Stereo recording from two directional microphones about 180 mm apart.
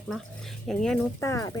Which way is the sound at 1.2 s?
15° left (ahead or behind).